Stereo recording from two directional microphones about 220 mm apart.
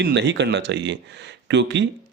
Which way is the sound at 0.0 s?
50° right (ahead or behind).